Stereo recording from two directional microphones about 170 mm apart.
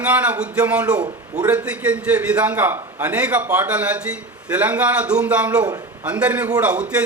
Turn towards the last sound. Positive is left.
turn(degrees=-5)  # may be behind; listen again after turning